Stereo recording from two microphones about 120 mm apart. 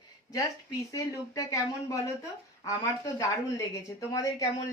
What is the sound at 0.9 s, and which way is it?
Speech, 30° left (ahead or behind).